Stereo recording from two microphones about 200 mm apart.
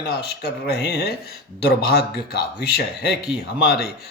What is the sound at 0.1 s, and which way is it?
Speech, 55° left (ahead or behind).